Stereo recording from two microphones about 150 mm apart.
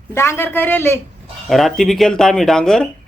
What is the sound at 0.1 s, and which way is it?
Speech, 15° left (ahead or behind).